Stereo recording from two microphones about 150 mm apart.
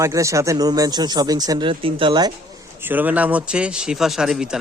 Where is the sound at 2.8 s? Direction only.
10° right (ahead or behind).